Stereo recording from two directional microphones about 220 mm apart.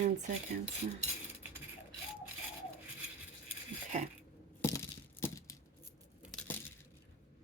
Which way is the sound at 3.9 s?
35° right (ahead or behind).